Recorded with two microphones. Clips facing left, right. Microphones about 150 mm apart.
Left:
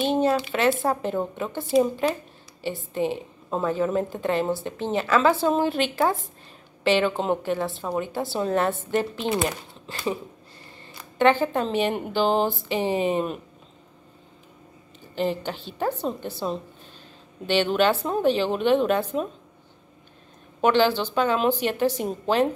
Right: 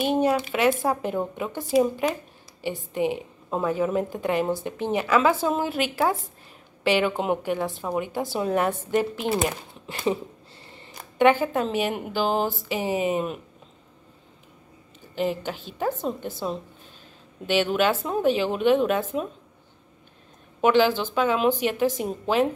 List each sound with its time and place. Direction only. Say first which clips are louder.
0.0 s a woman's voice: even; 10° right (ahead or behind)
9.8 s speech: right 3 dB; 20° right (ahead or behind); by 13.4 s 5° right (ahead or behind)
15.1 s speech: even; 5° right (ahead or behind)
17.5 s speech: left 1 dB; 5° right (ahead or behind)
20.6 s speech: even; 5° right (ahead or behind)